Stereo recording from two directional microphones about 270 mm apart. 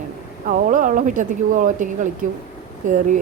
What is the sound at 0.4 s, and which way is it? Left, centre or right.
Speech, right.